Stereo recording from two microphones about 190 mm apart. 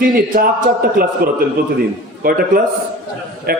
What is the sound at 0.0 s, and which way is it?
A man's voice, 50° right (ahead or behind).